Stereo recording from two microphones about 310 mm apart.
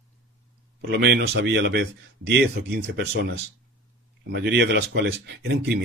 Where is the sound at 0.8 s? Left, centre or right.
Right.